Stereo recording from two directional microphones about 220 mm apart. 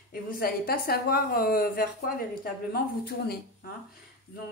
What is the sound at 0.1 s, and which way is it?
A woman's voice, 45° left (ahead or behind).